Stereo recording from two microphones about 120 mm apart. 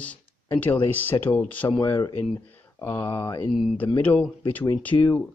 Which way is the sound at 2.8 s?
20° left (ahead or behind).